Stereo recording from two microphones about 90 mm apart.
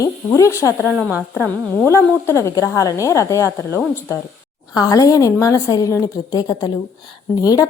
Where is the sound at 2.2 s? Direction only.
30° left (ahead or behind).